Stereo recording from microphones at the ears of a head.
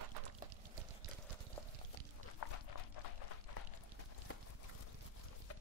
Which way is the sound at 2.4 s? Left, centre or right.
Left.